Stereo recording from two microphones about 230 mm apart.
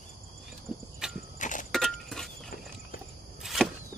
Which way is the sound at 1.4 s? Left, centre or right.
Left.